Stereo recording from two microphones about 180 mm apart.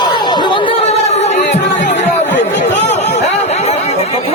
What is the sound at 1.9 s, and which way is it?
Music, 80° left.